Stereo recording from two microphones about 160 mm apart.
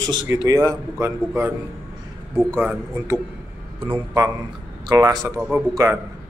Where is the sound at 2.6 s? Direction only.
15° right (ahead or behind).